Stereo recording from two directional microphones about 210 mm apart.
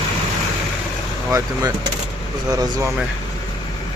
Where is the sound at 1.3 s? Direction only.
15° right (ahead or behind).